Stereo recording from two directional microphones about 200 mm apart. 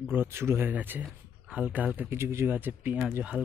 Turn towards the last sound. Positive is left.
turn(degrees=-5)  # may be behind; listen again after turning